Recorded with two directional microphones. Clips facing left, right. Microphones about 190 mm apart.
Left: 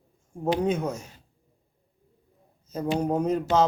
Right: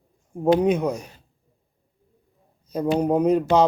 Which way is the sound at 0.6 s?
15° right (ahead or behind).